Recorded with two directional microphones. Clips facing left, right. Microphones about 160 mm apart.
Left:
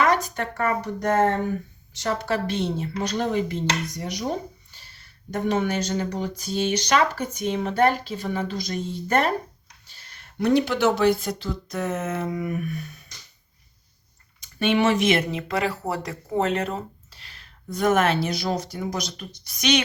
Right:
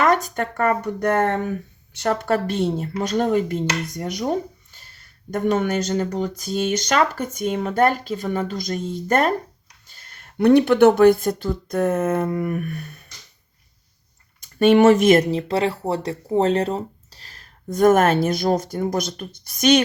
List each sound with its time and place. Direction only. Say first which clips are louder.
0.0 s speech: right 3 dB; 45° right (ahead or behind)
14.4 s speech: right 8 dB; 45° right (ahead or behind)